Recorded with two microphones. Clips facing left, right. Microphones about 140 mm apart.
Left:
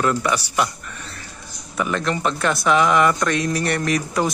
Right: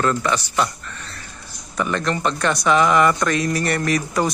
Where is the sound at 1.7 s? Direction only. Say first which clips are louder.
Even; 5° left (ahead or behind).